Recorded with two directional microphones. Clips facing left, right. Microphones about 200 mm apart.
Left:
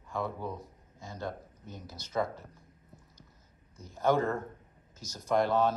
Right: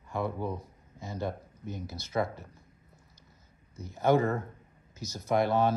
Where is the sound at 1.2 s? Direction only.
5° right (ahead or behind).